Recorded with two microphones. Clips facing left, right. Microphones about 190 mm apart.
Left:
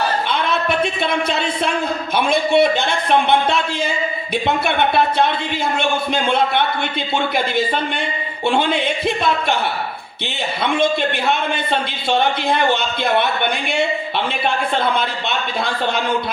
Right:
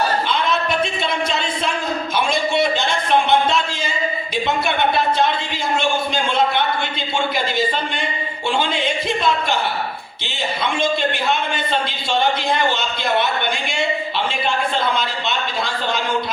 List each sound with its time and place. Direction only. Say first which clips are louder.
0.3 s a sound: left 1 dB; 60° left (ahead or behind)
1.3 s a man's voice: left 3 dB; 60° left (ahead or behind)
8.4 s a man's voice: left 3 dB; 60° left (ahead or behind)
12.5 s a man's voice: left 3 dB; 55° left (ahead or behind)